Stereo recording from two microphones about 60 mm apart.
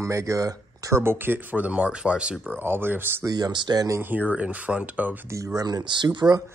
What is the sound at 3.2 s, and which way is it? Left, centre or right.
Speech, right.